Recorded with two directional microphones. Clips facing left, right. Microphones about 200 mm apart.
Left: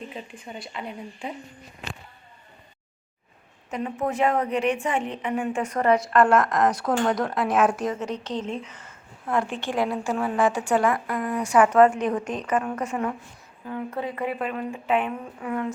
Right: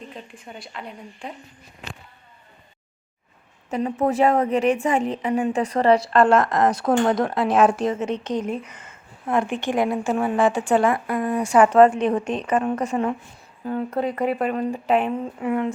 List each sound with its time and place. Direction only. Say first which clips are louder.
0.0 s a woman's voice: left 1 dB; centre (ahead or behind)
3.7 s a woman's voice: right 5 dB; 40° right (ahead or behind)
15.2 s a woman's voice: right 5 dB; 20° right (ahead or behind)